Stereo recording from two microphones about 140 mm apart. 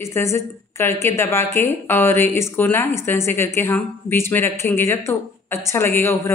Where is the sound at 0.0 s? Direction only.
20° left (ahead or behind).